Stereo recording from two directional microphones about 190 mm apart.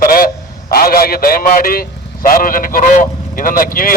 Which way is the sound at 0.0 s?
50° left (ahead or behind).